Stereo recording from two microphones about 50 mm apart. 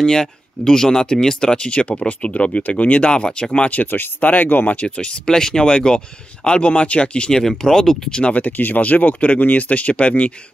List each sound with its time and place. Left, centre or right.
0.0 s speech: centre
3.8 s speech: left
4.8 s speech: centre
8.1 s speech: left